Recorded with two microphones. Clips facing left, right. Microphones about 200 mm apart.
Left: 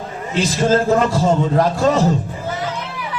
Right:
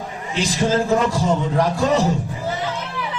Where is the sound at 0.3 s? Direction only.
15° right (ahead or behind).